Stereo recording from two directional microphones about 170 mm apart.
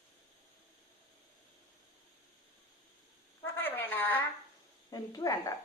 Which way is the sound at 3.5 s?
10° left (ahead or behind).